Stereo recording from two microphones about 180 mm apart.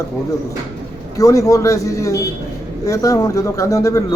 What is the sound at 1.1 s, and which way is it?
Speech, 20° left (ahead or behind).